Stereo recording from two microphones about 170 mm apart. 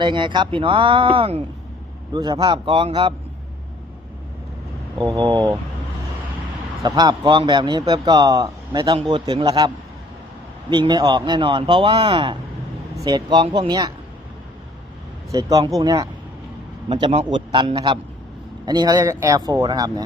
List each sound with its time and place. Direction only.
0.0 s a man's voice: 30° right (ahead or behind)
4.9 s a man's voice: 25° right (ahead or behind)
6.8 s a man's voice: 25° right (ahead or behind)
15.3 s a man's voice: 20° right (ahead or behind)